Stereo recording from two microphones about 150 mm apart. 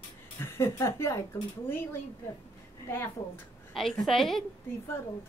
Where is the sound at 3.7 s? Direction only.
Centre (ahead or behind).